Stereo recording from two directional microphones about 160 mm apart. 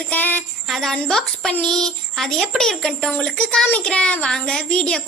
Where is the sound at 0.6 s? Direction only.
Centre (ahead or behind).